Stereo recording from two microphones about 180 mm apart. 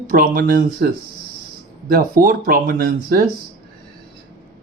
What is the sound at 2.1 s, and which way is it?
Speech, 50° right (ahead or behind).